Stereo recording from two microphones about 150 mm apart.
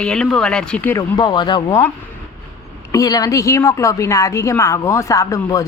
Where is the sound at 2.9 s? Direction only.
25° left (ahead or behind).